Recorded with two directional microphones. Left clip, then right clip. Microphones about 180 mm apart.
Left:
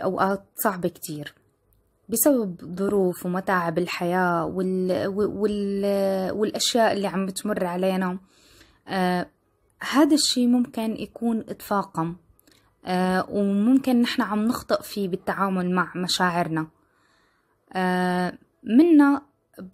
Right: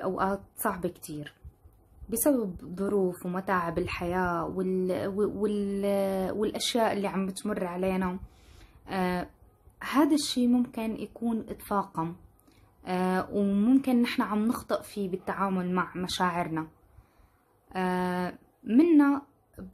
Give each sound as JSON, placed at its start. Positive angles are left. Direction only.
{"t": 0.0, "sound": "a woman's voice", "side_deg": 45}
{"t": 17.6, "sound": "speech", "side_deg": 45}